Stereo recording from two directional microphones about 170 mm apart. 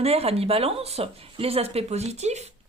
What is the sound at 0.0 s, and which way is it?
A woman's voice, 35° right (ahead or behind).